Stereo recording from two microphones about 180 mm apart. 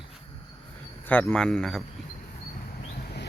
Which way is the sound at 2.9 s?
55° left (ahead or behind).